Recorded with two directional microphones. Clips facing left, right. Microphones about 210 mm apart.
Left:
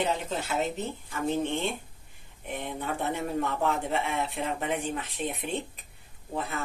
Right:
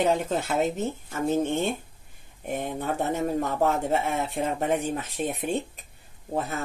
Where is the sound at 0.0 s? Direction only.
50° right (ahead or behind).